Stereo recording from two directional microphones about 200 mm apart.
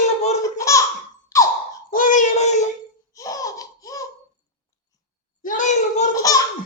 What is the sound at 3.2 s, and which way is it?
Laughter, 15° left (ahead or behind).